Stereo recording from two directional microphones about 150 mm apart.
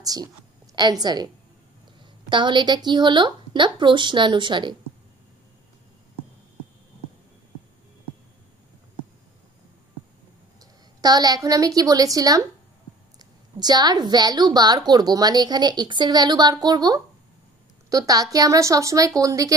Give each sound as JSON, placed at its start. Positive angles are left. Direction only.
{"t": 0.0, "sound": "a woman's voice", "side_deg": -25}
{"t": 10.6, "sound": "a woman's voice", "side_deg": -25}